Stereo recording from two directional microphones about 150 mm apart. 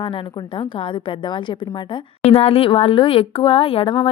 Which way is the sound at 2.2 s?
40° left (ahead or behind).